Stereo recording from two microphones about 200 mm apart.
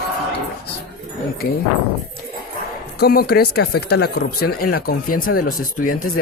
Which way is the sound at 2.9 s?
50° left (ahead or behind).